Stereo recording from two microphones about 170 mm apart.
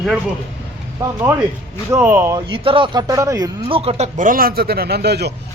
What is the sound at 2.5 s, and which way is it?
Speech, 30° right (ahead or behind).